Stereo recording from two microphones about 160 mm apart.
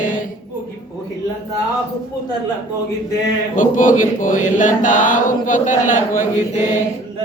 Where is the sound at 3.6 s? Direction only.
55° left (ahead or behind).